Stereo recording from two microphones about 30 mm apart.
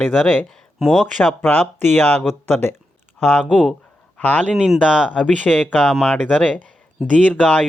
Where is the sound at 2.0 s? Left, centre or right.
Left.